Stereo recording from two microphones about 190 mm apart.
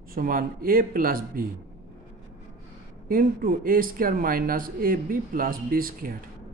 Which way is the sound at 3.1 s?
50° right (ahead or behind).